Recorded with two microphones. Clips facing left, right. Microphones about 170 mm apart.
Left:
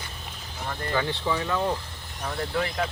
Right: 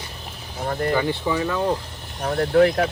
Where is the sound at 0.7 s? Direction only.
45° right (ahead or behind).